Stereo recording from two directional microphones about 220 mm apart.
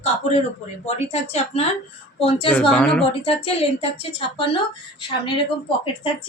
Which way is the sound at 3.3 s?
25° left (ahead or behind).